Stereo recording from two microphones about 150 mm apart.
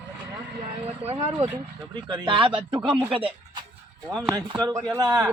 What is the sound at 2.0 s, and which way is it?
Speech, 30° right (ahead or behind).